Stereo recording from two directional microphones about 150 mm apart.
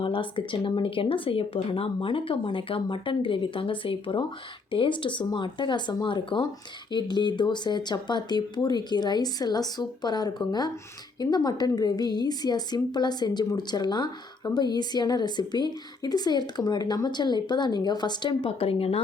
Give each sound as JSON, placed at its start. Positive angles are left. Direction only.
{"t": 0.0, "sound": "a woman's voice", "side_deg": 35}